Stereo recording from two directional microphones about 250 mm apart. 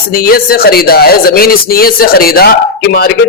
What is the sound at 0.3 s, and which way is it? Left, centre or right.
Speech, left.